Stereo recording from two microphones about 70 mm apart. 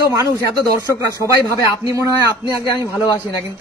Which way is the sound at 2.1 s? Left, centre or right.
Right.